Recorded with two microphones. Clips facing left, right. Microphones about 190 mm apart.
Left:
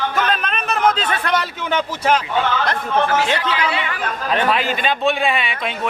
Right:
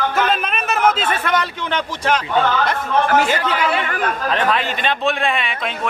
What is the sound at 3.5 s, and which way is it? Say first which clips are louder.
Speech: right 2 dB; 45° right (ahead or behind).